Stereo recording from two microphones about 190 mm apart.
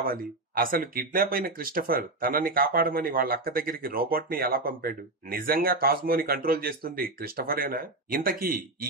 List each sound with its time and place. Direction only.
0.0 s speech: 50° right (ahead or behind)